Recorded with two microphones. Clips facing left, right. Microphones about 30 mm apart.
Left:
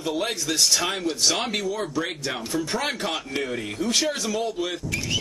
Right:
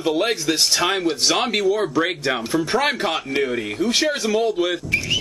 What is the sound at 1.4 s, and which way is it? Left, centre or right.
Speech, centre.